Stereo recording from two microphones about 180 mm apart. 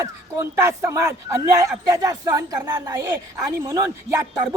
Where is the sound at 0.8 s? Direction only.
15° right (ahead or behind).